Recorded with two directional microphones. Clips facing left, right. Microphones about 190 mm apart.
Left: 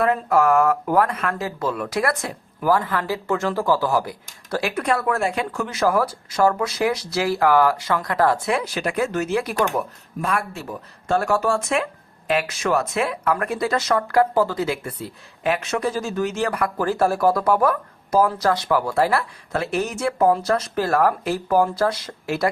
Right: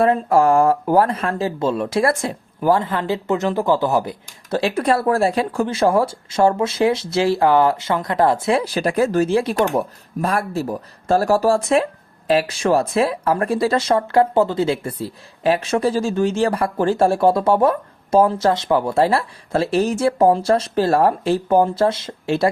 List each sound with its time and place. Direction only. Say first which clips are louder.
0.0 s speech: right 3 dB; 30° right (ahead or behind)